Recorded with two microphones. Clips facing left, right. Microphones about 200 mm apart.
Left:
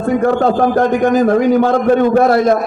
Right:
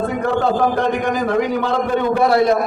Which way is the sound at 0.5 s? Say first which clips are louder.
Left 4 dB; 45° left (ahead or behind).